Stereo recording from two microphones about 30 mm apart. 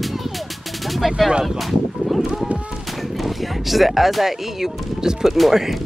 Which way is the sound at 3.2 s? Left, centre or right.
Centre.